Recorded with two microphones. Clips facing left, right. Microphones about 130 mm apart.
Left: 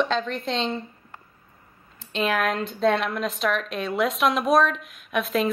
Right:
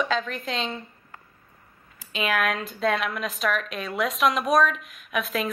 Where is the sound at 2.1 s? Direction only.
Centre (ahead or behind).